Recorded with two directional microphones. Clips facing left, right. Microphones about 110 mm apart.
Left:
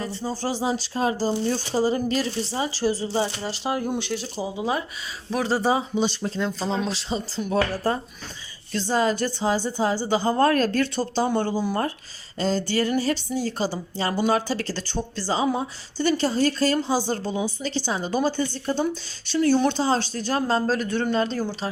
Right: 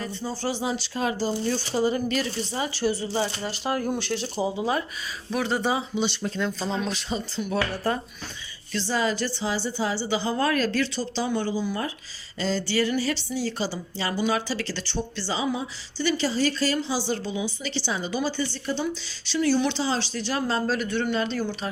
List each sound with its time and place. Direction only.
0.0 s speech: 35° left (ahead or behind); by 4.1 s 20° left (ahead or behind)
4.1 s speech: 5° left (ahead or behind)
5.3 s speech: 35° left (ahead or behind)
6.2 s speech: 25° left (ahead or behind)
8.7 s a woman's voice: 45° left (ahead or behind)
12.4 s a woman's voice: 45° left (ahead or behind)